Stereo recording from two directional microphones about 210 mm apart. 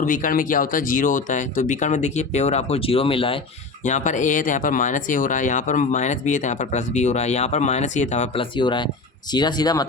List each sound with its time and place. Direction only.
0.0 s speech: 40° left (ahead or behind)
3.8 s speech: 35° left (ahead or behind); by 9.8 s 20° left (ahead or behind)